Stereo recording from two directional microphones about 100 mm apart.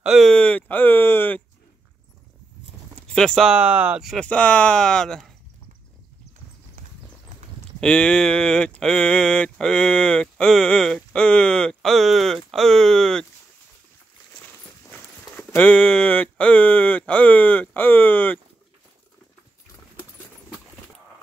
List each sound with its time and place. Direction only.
0.0 s speech: centre (ahead or behind)
0.3 s a sound: 10° left (ahead or behind)
3.1 s speech: 5° left (ahead or behind)
3.5 s speech: 15° right (ahead or behind)
4.0 s speech: centre (ahead or behind)
4.3 s speech: 15° left (ahead or behind)
7.8 s speech: 10° left (ahead or behind)
14.9 s clip-clop: 20° left (ahead or behind)